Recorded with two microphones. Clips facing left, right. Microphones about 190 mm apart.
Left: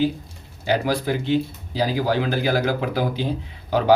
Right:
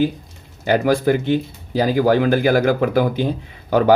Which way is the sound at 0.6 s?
50° right (ahead or behind).